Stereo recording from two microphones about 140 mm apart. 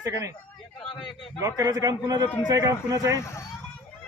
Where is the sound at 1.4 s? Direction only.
25° right (ahead or behind).